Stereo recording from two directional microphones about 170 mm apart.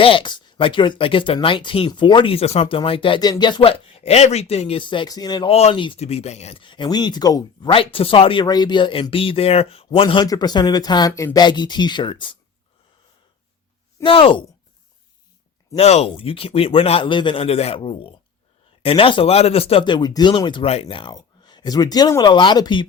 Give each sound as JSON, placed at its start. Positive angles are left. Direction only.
{"t": 0.0, "sound": "speech", "side_deg": 30}
{"t": 5.5, "sound": "speech", "side_deg": 35}
{"t": 14.0, "sound": "speech", "side_deg": 30}
{"t": 15.7, "sound": "speech", "side_deg": 40}